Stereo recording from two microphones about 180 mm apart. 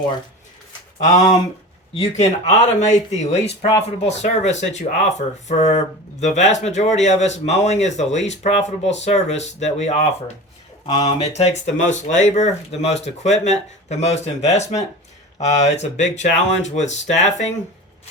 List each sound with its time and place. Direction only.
2.0 s speech: 40° left (ahead or behind)
10.8 s speech: 25° left (ahead or behind)
11.2 s speech: 40° left (ahead or behind)